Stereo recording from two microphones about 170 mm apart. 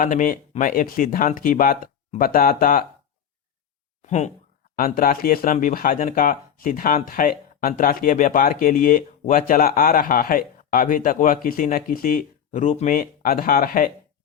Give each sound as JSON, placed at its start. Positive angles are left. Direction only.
{"t": 0.0, "sound": "speech", "side_deg": 50}
{"t": 4.0, "sound": "speech", "side_deg": 45}
{"t": 4.8, "sound": "speech", "side_deg": 55}